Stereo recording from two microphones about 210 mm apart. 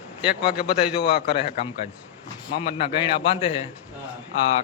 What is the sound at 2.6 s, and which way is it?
Speech, 25° left (ahead or behind).